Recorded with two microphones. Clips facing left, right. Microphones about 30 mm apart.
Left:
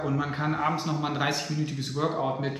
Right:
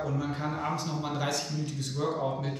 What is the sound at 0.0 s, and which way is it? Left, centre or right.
A man's voice, left.